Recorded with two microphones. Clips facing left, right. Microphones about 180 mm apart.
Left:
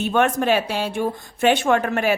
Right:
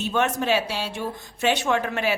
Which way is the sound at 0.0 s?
55° left (ahead or behind).